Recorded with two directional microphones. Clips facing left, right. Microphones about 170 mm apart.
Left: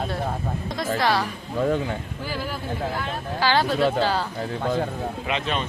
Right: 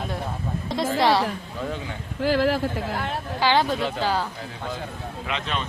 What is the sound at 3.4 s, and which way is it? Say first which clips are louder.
Speech: left 1 dB; 20° right (ahead or behind).